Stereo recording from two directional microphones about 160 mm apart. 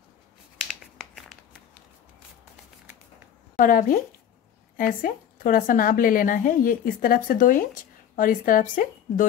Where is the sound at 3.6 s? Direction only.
55° left (ahead or behind).